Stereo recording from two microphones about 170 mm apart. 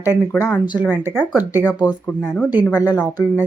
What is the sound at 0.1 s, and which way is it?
Speech, 20° left (ahead or behind).